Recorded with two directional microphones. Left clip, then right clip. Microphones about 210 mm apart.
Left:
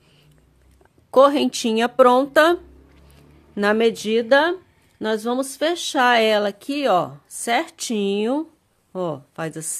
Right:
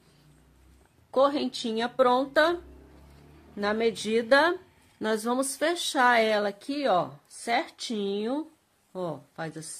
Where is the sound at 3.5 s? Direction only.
40° left (ahead or behind).